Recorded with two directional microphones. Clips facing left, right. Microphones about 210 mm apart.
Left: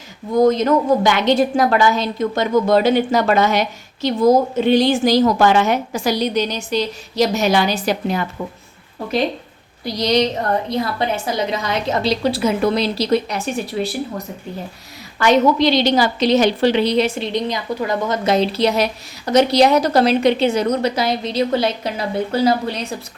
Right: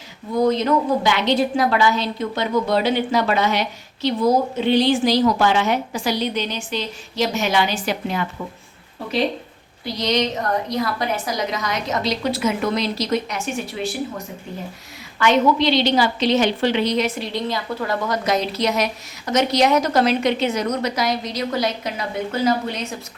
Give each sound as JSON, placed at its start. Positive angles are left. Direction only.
{"t": 0.3, "sound": "a woman's voice", "side_deg": 45}
{"t": 9.8, "sound": "a woman's voice", "side_deg": 35}
{"t": 15.2, "sound": "a woman's voice", "side_deg": 40}